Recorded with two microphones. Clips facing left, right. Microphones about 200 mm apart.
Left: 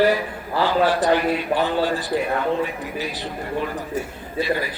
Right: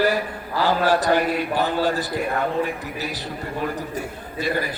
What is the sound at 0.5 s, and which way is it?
A man's voice, 40° right (ahead or behind).